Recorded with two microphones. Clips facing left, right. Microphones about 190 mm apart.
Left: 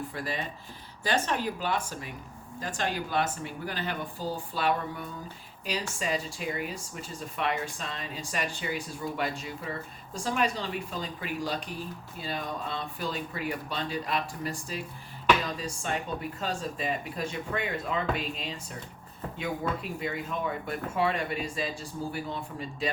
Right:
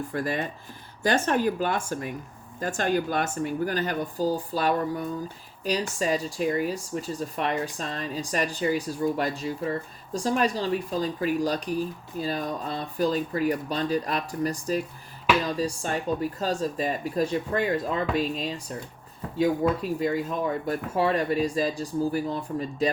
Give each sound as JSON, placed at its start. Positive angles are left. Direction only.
{"t": 0.1, "sound": "speech", "side_deg": -50}
{"t": 15.5, "sound": "speech", "side_deg": -40}